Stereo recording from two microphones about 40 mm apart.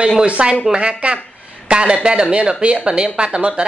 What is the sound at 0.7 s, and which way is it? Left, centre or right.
A man's voice, right.